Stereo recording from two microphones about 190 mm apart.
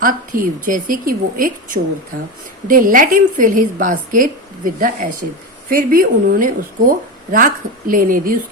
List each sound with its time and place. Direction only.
0.0 s a woman's voice: 45° right (ahead or behind)